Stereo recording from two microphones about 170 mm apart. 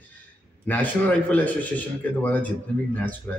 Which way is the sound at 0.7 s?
10° left (ahead or behind).